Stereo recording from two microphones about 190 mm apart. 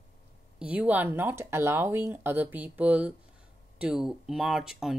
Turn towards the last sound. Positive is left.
turn(degrees=-5)  # may be behind; listen again after turning